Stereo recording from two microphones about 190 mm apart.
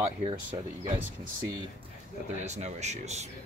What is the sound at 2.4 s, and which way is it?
Speech, 35° right (ahead or behind).